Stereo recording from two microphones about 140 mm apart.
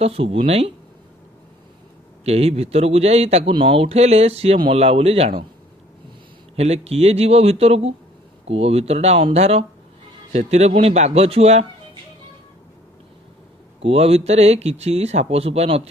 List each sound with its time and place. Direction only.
0.0 s speech: 45° right (ahead or behind)
2.2 s speech: 50° right (ahead or behind)
6.5 s speech: 50° right (ahead or behind)
13.8 s speech: 45° right (ahead or behind)